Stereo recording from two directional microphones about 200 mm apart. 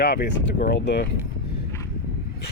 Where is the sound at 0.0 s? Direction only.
55° left (ahead or behind).